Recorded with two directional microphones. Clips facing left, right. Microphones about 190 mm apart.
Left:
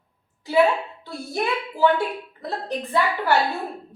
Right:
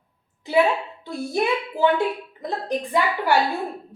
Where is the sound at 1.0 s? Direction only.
20° right (ahead or behind).